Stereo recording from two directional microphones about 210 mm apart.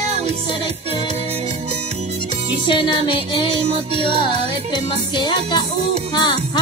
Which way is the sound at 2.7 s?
20° left (ahead or behind).